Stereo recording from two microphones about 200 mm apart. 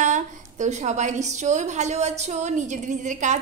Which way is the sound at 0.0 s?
40° right (ahead or behind).